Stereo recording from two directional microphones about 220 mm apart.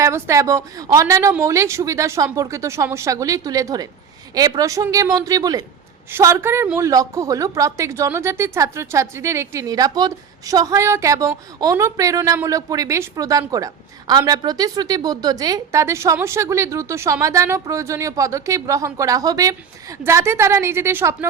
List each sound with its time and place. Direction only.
0.0 s a woman's voice: 15° right (ahead or behind)